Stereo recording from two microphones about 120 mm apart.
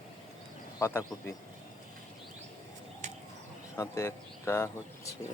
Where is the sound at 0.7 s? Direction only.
20° left (ahead or behind).